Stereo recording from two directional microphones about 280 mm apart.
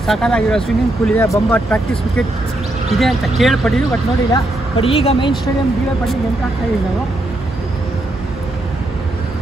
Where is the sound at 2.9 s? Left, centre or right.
Centre.